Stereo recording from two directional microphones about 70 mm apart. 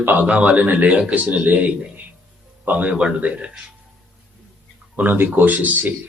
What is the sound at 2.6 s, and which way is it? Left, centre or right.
Speech, right.